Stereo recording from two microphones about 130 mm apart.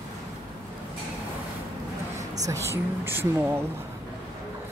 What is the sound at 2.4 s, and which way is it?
Speech, 20° right (ahead or behind).